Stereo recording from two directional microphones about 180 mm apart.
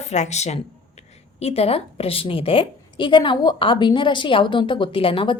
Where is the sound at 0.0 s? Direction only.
40° left (ahead or behind).